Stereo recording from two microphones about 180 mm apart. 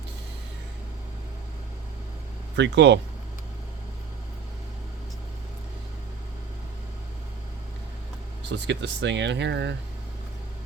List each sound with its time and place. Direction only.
2.6 s speech: 70° right (ahead or behind)
8.4 s speech: 75° right (ahead or behind)